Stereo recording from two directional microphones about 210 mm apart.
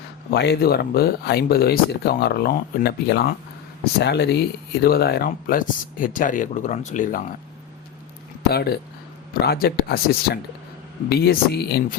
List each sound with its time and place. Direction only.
0.3 s speech: 50° left (ahead or behind)
8.4 s speech: 50° left (ahead or behind)